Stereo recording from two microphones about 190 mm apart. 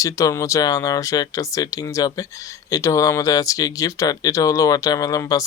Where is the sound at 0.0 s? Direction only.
15° left (ahead or behind).